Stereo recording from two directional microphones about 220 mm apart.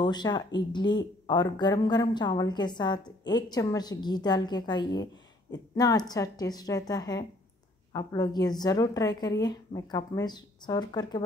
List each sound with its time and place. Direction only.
0.0 s a woman's voice: 20° left (ahead or behind)